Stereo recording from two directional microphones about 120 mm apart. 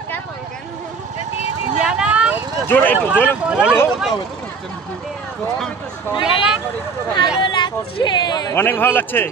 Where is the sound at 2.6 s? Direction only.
15° left (ahead or behind).